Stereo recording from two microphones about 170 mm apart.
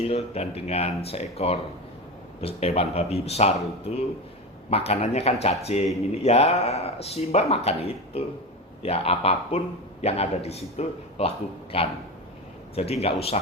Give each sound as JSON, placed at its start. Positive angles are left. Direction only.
{"t": 0.0, "sound": "a man's voice", "side_deg": 35}